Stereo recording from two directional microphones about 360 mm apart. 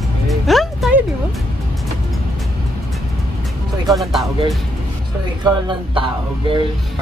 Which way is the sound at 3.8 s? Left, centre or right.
Centre.